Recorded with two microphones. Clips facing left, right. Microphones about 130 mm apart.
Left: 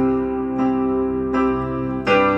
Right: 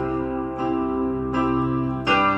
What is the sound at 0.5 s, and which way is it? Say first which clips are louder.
Music: left 5 dB; 15° right (ahead or behind).